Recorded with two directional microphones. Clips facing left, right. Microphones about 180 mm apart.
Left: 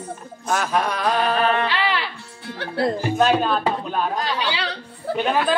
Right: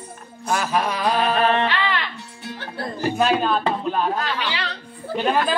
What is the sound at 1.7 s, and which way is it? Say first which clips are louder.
Music: left 1 dB; 10° left (ahead or behind).